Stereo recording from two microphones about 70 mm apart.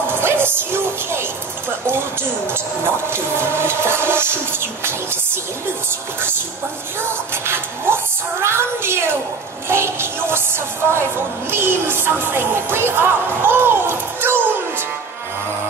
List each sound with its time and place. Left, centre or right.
0.0 s music: right
1.9 s speech: right
7.1 s music: right